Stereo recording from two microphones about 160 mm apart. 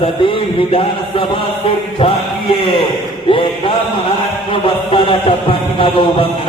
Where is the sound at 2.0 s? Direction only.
35° left (ahead or behind).